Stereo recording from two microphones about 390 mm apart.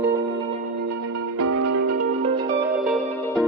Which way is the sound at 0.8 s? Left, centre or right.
Right.